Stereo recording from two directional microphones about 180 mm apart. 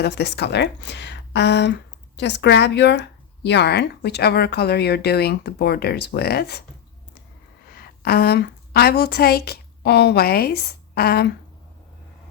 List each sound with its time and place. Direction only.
0.0 s a woman's voice: 65° left (ahead or behind)
7.7 s a woman's voice: 60° left (ahead or behind)